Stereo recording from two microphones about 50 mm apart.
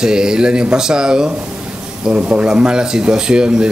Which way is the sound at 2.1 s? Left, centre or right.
Right.